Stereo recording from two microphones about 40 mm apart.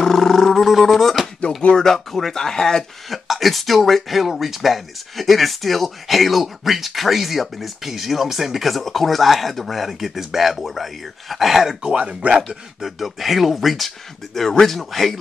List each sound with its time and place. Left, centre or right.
0.0 s roar: centre
0.7 s a sound: centre
1.8 s speech: centre
3.1 s speech: centre
11.8 s speech: right
12.4 s speech: centre